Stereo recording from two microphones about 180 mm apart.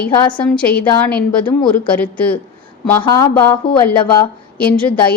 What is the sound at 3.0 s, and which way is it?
Speech, 20° left (ahead or behind).